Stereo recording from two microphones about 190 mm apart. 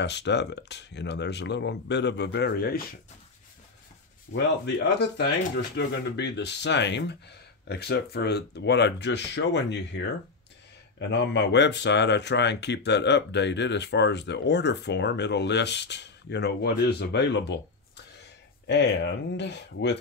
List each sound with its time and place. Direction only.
0.0 s speech: 65° left (ahead or behind)
4.3 s speech: 65° left (ahead or behind)
18.7 s speech: 65° left (ahead or behind)